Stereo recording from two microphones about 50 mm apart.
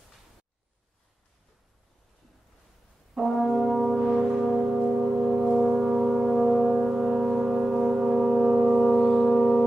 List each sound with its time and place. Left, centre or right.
3.2 s brass instrument: centre